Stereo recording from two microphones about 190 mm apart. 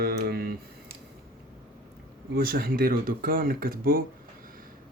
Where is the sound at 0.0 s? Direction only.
55° right (ahead or behind).